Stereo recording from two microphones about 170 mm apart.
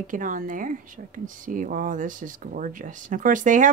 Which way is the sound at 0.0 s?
50° right (ahead or behind).